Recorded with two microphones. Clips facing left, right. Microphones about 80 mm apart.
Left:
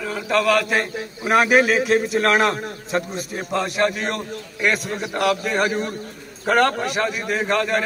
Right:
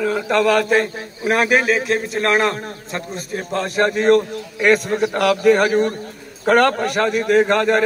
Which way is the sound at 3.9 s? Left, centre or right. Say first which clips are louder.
Right 12 dB; right.